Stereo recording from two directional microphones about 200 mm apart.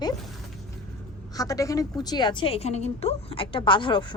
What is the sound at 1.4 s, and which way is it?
A woman's voice, 15° left (ahead or behind).